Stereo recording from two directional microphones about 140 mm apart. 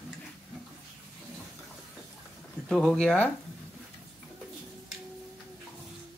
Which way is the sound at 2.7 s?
5° left (ahead or behind).